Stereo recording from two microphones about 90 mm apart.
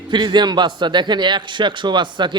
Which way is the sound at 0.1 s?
55° right (ahead or behind).